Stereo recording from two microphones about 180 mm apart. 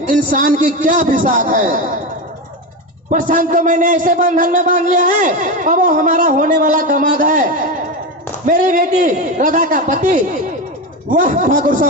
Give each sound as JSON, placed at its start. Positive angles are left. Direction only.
{"t": 0.1, "sound": "a man's voice", "side_deg": -45}
{"t": 3.1, "sound": "a man's voice", "side_deg": -45}